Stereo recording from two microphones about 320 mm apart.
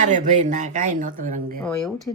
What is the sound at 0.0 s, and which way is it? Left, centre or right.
Speech, right.